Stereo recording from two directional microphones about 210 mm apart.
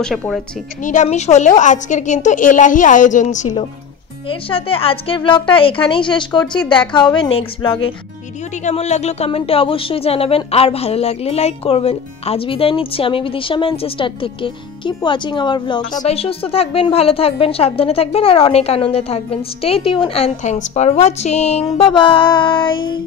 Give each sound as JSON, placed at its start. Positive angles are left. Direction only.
{"t": 0.0, "sound": "a woman's voice", "side_deg": 0}
{"t": 0.8, "sound": "a woman's voice", "side_deg": 35}
{"t": 4.3, "sound": "a woman's voice", "side_deg": 25}